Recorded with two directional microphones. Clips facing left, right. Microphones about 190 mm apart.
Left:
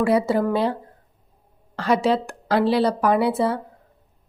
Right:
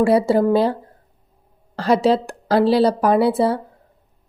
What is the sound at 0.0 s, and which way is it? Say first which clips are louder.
A woman's voice: right 4 dB; 30° right (ahead or behind).